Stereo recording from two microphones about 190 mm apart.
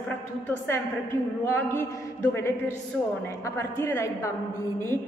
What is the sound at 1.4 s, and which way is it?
Speech, 15° left (ahead or behind).